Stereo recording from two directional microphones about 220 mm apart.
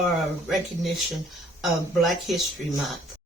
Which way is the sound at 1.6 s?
Centre (ahead or behind).